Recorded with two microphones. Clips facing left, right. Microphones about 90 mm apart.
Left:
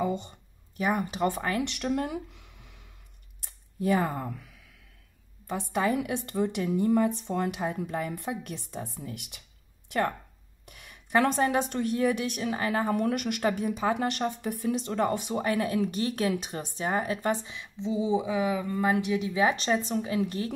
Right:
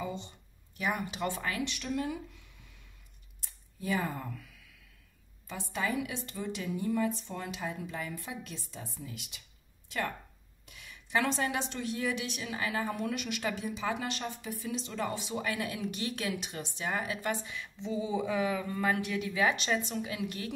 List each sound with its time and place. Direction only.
0.0 s speech: 55° left (ahead or behind)
0.7 s a woman's voice: 35° left (ahead or behind)
1.6 s speech: 65° left (ahead or behind)
3.3 s a sound: 55° left (ahead or behind)
5.5 s a woman's voice: 55° left (ahead or behind)
10.6 s speech: 55° left (ahead or behind)
12.9 s speech: 55° left (ahead or behind); by 17.6 s 35° left (ahead or behind)
17.6 s a sound: 20° left (ahead or behind)
18.2 s a woman's voice: 15° left (ahead or behind); by 20.5 s 35° left (ahead or behind)